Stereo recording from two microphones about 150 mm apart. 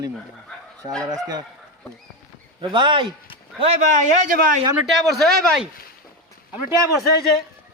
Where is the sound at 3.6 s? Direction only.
50° right (ahead or behind).